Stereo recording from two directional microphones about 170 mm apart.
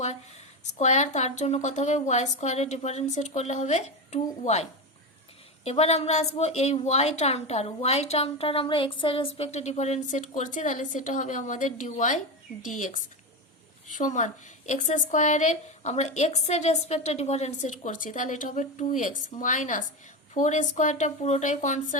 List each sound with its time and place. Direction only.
0.6 s a woman's voice: 45° left (ahead or behind)
13.9 s a woman's voice: 45° left (ahead or behind)